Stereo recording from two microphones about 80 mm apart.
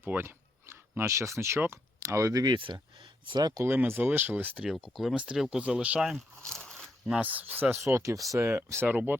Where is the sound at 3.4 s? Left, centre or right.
Right.